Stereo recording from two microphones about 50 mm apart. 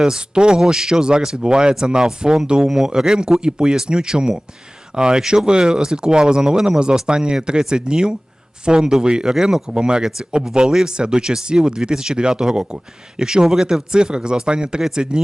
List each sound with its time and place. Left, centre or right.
0.0 s speech: centre